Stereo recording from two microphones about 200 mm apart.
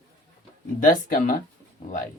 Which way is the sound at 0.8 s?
45° left (ahead or behind).